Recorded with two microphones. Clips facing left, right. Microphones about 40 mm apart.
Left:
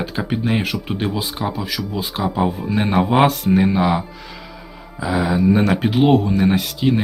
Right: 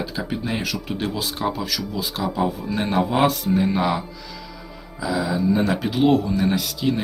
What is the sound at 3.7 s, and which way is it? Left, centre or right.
Speech, centre.